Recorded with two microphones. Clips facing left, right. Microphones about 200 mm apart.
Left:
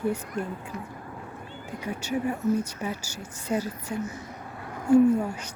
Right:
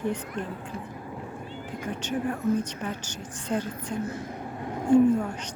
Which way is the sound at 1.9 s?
10° left (ahead or behind).